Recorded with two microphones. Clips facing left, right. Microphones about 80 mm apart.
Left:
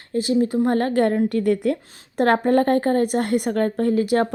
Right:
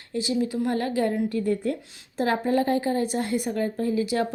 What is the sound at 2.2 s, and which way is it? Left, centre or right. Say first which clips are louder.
A woman's voice: left 6 dB; left.